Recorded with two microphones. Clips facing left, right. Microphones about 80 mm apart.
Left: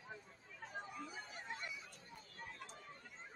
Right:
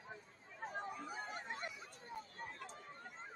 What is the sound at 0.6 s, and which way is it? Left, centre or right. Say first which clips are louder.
Chatter: right 4 dB; right.